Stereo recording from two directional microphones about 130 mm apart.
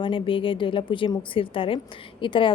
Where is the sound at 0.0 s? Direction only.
40° left (ahead or behind).